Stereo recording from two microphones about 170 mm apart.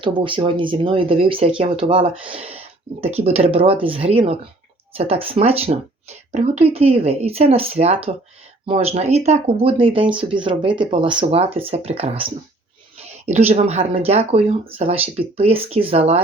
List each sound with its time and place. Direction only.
0.0 s speech: 30° right (ahead or behind)